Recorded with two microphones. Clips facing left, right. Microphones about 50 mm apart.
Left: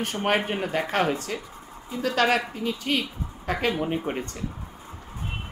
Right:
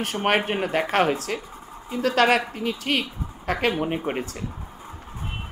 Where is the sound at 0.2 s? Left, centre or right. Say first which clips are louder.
Right 3 dB; right.